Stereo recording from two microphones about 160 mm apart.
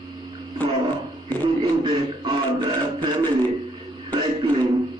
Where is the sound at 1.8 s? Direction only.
30° right (ahead or behind).